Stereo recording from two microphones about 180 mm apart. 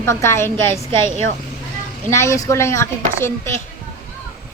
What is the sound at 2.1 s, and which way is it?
A woman's voice, 15° left (ahead or behind).